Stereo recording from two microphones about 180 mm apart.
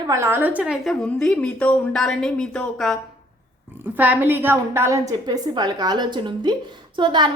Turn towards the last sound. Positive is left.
turn(degrees=-25)  # may be behind; listen again after turning